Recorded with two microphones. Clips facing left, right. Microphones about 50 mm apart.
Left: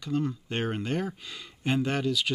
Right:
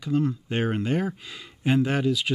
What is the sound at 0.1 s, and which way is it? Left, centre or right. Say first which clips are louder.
Speech: right 4 dB; centre.